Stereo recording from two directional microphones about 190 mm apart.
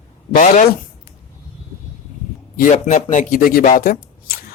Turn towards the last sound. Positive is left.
turn(degrees=50)  # may be behind; listen again after turning